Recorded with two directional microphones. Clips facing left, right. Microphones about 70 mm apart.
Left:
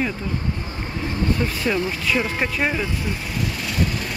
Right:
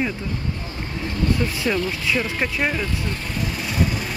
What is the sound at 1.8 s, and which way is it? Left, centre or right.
Speech, centre.